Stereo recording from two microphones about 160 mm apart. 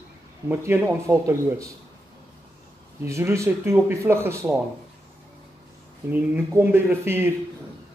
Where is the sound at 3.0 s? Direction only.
20° right (ahead or behind).